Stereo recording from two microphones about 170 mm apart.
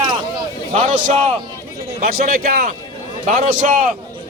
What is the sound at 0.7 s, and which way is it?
Speech, 40° right (ahead or behind).